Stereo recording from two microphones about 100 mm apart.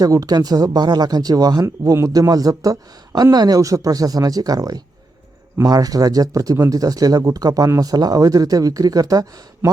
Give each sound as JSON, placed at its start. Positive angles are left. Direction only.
{"t": 0.0, "sound": "speech", "side_deg": -40}